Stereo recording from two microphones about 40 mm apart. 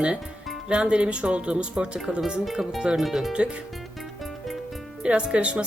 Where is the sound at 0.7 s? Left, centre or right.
Right.